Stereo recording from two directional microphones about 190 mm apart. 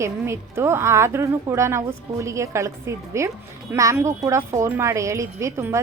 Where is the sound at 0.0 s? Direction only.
15° right (ahead or behind).